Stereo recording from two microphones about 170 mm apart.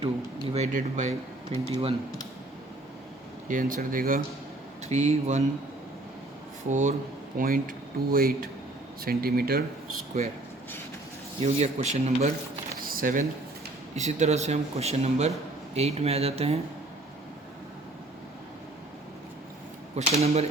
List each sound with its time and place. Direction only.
0.0 s speech: 35° right (ahead or behind)
1.7 s speech: 35° right (ahead or behind)
3.5 s speech: 55° right (ahead or behind)
4.9 s speech: 40° right (ahead or behind)
6.7 s speech: 45° right (ahead or behind)
7.3 s speech: 55° right (ahead or behind)
11.3 s speech: 40° right (ahead or behind)
12.9 s a sound: 55° right (ahead or behind)
13.9 s speech: 40° right (ahead or behind)
20.0 s speech: 35° right (ahead or behind)